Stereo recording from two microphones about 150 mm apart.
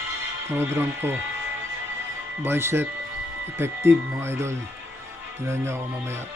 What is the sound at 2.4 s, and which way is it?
Speech, 15° right (ahead or behind).